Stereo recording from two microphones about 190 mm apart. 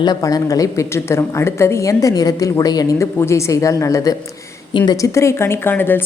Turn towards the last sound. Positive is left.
turn(degrees=10)  # may be behind; listen again after turning